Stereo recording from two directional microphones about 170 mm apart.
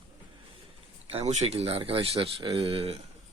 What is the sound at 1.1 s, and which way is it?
Speech, 35° right (ahead or behind).